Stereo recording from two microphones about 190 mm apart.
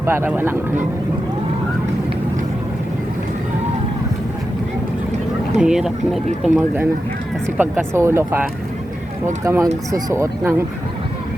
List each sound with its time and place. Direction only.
0.0 s speech: 15° right (ahead or behind)
5.5 s speech: 5° right (ahead or behind)